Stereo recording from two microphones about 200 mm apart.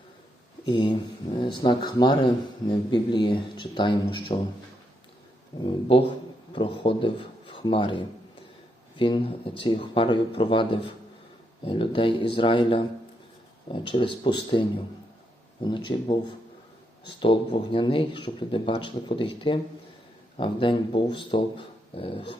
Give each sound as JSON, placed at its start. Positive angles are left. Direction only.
{"t": 0.6, "sound": "speech", "side_deg": 25}
{"t": 5.5, "sound": "speech", "side_deg": 25}
{"t": 15.6, "sound": "speech", "side_deg": 25}